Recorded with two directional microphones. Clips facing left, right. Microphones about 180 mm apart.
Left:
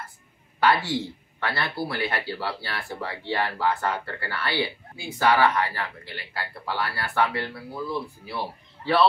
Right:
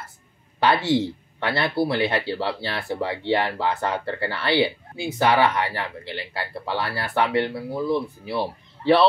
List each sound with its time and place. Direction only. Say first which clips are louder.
0.6 s speech: right 3 dB; 25° right (ahead or behind)